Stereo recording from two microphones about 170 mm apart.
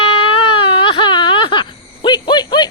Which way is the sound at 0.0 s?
30° left (ahead or behind).